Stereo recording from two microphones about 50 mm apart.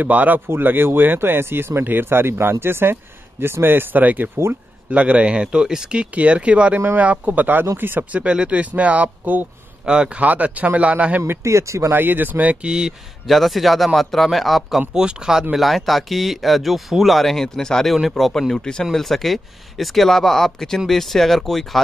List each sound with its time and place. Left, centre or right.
0.0 s speech: right
4.0 s speech: right
8.1 s speech: right
9.8 s speech: right
11.4 s speech: right
11.9 s speech: right
12.6 s speech: centre
13.3 s speech: centre
15.0 s speech: centre
15.5 s speech: centre
18.9 s speech: centre